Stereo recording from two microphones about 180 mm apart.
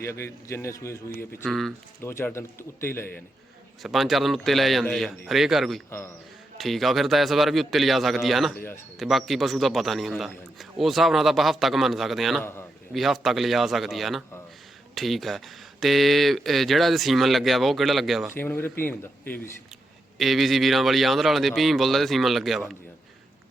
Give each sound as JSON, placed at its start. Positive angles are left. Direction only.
{"t": 0.0, "sound": "a man's voice", "side_deg": 15}
{"t": 1.1, "sound": "speech", "side_deg": 55}
{"t": 1.5, "sound": "a man's voice", "side_deg": 0}
{"t": 2.0, "sound": "a man's voice", "side_deg": 15}
{"t": 3.8, "sound": "a man's voice", "side_deg": 0}
{"t": 12.4, "sound": "a man's voice", "side_deg": 15}
{"t": 12.9, "sound": "a man's voice", "side_deg": 0}
{"t": 18.3, "sound": "a man's voice", "side_deg": 10}
{"t": 20.1, "sound": "a man's voice", "side_deg": 0}